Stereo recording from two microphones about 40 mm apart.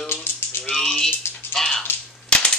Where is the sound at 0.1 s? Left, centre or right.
Left.